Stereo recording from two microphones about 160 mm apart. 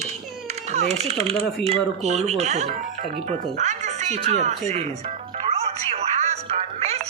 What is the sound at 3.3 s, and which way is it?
Music, 45° right (ahead or behind).